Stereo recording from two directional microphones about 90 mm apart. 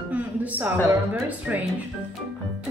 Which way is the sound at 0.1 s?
15° right (ahead or behind).